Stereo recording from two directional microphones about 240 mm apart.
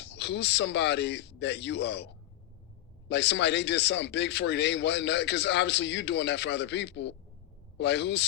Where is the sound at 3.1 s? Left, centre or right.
Left.